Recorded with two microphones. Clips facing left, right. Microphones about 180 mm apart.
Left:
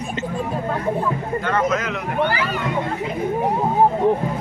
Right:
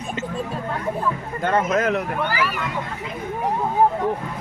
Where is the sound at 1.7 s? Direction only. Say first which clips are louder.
Right 3 dB; 55° right (ahead or behind).